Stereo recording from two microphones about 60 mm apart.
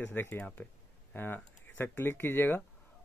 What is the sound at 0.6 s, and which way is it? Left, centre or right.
Speech, left.